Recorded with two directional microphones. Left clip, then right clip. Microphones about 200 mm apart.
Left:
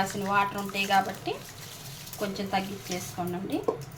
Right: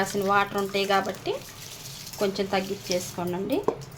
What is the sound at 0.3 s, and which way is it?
Speech, 45° right (ahead or behind).